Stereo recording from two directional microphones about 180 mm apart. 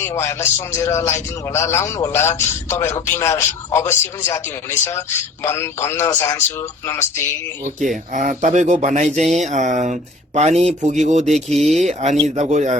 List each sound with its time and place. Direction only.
0.0 s a man's voice: 15° left (ahead or behind)
7.8 s speech: 45° right (ahead or behind)
11.4 s speech: centre (ahead or behind)
11.8 s speech: 40° right (ahead or behind)